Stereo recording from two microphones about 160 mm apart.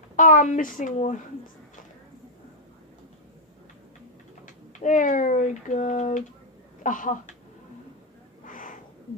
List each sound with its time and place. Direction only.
0.1 s speech: 55° left (ahead or behind)
4.8 s speech: 55° left (ahead or behind)
8.5 s a sound: 55° left (ahead or behind)